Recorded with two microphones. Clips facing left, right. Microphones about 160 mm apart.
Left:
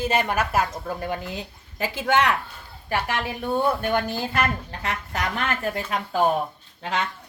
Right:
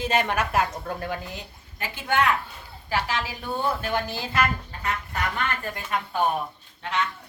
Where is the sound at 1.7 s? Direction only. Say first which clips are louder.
Left 3 dB; 90° left.